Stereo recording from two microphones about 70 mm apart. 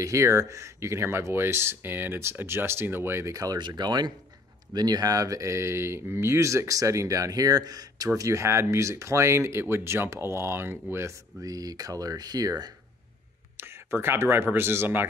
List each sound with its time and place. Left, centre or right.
0.0 s speech: right
3.3 s speech: right
3.5 s speech: right
4.7 s speech: right
11.4 s speech: right
13.6 s speech: right